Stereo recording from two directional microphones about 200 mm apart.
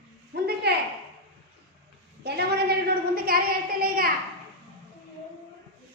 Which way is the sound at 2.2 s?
55° right (ahead or behind).